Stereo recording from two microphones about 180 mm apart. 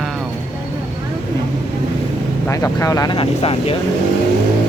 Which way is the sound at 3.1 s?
30° left (ahead or behind).